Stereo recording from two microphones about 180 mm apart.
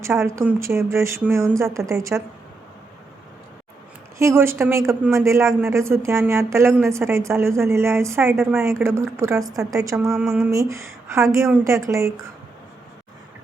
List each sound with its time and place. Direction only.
0.0 s a woman's voice: 15° right (ahead or behind)
4.2 s a woman's voice: 15° right (ahead or behind)
10.1 s a sound: 5° right (ahead or behind)
10.5 s a woman's voice: 15° right (ahead or behind)